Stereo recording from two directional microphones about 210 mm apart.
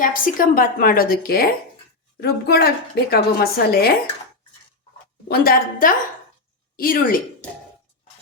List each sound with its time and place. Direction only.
0.0 s a woman's voice: 40° left (ahead or behind)
5.3 s a woman's voice: 45° left (ahead or behind)